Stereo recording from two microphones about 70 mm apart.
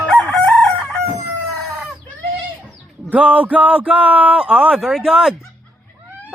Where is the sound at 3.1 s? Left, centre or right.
Centre.